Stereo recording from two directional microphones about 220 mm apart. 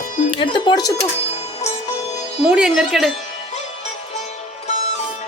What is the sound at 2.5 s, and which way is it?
Speech, centre (ahead or behind).